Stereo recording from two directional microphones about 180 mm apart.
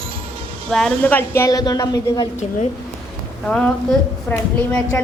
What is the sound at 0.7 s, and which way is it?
A woman's voice, 5° left (ahead or behind).